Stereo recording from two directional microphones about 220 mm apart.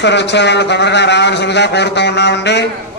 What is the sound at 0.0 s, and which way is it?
Speech, 50° left (ahead or behind).